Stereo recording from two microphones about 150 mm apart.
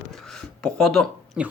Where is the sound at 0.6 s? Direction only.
5° left (ahead or behind).